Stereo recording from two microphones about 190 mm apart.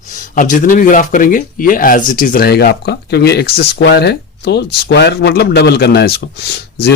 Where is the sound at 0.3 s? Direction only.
45° left (ahead or behind).